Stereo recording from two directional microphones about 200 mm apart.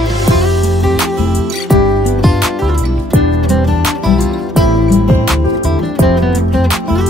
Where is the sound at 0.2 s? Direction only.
Centre (ahead or behind).